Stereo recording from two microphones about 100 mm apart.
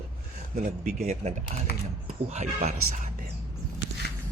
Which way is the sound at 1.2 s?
90° right.